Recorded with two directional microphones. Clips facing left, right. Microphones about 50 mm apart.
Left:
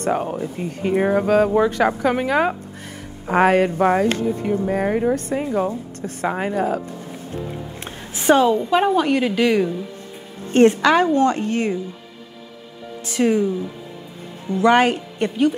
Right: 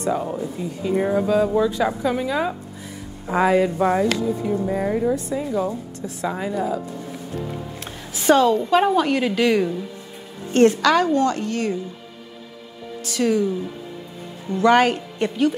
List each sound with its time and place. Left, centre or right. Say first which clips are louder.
0.0 s speech: left 2 dB; left
3.7 s speech: left 2 dB; left
7.8 s a sound: left 1 dB; left
8.6 s a woman's voice: even; centre
10.5 s a woman's voice: left 2 dB; left
13.0 s a woman's voice: left 2 dB; left
14.5 s a woman's voice: left 1 dB; centre